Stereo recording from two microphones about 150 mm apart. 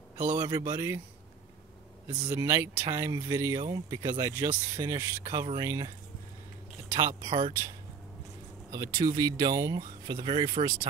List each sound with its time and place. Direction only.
0.3 s speech: 25° right (ahead or behind)
2.2 s speech: 20° right (ahead or behind)
6.9 s speech: 25° right (ahead or behind)
8.7 s speech: 25° right (ahead or behind)